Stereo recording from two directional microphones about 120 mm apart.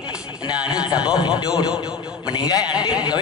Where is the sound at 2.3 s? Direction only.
35° left (ahead or behind).